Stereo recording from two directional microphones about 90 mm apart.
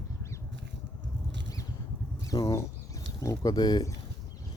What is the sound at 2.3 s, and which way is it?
Speech, 40° left (ahead or behind).